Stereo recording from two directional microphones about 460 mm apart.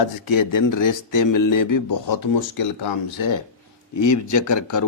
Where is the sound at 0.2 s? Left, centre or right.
Left.